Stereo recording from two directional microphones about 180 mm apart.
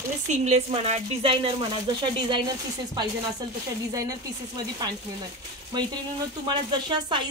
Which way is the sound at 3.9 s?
20° right (ahead or behind).